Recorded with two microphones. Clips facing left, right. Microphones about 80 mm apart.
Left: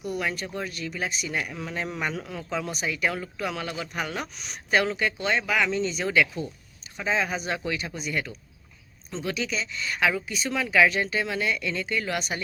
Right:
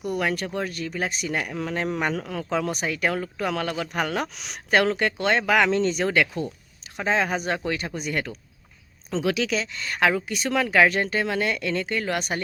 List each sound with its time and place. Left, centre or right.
0.0 s speech: right
4.7 s speech: right
9.0 s speech: right